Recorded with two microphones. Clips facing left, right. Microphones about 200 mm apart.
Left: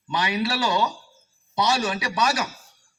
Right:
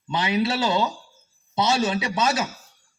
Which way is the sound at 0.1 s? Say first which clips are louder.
Right 2 dB; 20° right (ahead or behind).